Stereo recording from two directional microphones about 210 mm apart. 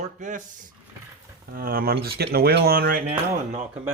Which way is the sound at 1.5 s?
45° right (ahead or behind).